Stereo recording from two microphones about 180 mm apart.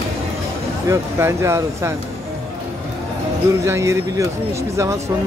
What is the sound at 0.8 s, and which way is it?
Speech, 15° right (ahead or behind).